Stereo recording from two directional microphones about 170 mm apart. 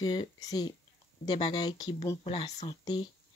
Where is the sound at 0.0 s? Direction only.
25° left (ahead or behind).